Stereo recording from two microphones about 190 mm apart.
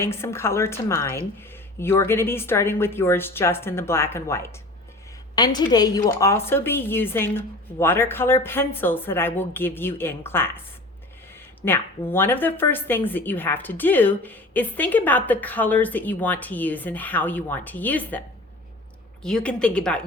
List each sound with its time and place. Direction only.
0.0 s a woman's voice: 15° left (ahead or behind)
11.6 s a woman's voice: 10° left (ahead or behind)
19.2 s a woman's voice: 5° left (ahead or behind)